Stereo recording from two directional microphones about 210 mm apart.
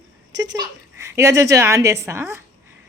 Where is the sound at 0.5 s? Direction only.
15° right (ahead or behind).